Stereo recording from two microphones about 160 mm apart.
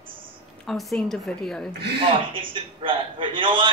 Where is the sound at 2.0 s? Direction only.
30° right (ahead or behind).